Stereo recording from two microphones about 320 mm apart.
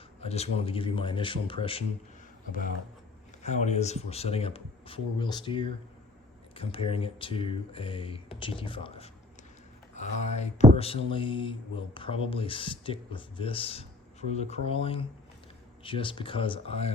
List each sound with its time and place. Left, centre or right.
0.2 s speech: centre